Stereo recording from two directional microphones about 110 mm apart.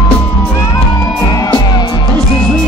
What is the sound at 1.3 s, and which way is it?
Music, 35° left (ahead or behind).